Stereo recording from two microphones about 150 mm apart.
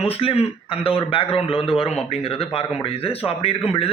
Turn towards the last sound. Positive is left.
turn(degrees=40)  # may be behind; listen again after turning